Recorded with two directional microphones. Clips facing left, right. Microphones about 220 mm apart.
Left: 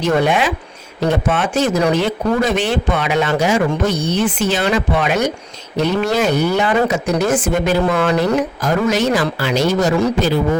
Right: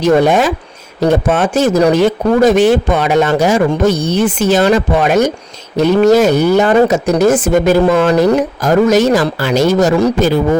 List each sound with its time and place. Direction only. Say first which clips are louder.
0.0 s speech: right 6 dB; 40° right (ahead or behind)